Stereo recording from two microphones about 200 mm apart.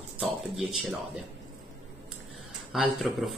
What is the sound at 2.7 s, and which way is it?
Speech, centre (ahead or behind).